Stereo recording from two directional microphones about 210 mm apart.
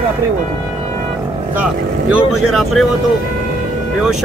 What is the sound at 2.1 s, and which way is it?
Vehicle, centre (ahead or behind).